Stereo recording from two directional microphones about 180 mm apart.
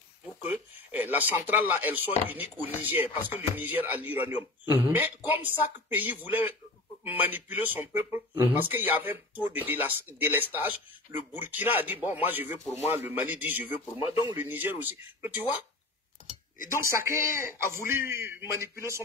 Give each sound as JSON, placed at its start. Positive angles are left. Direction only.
{"t": 0.5, "sound": "speech", "side_deg": -10}
{"t": 13.9, "sound": "speech", "side_deg": 35}
{"t": 14.3, "sound": "speech", "side_deg": -10}
{"t": 16.7, "sound": "speech", "side_deg": -15}